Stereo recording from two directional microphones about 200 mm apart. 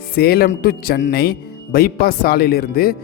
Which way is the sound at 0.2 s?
50° left (ahead or behind).